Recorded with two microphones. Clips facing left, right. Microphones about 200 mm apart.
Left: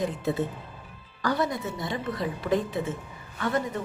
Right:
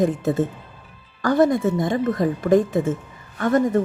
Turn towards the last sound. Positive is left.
turn(degrees=-45)  # may be behind; listen again after turning